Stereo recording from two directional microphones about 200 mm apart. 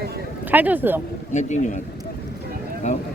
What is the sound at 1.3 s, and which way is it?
Speech, 35° left (ahead or behind).